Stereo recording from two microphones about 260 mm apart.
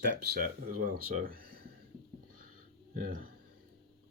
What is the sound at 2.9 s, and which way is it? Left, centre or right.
Speech, right.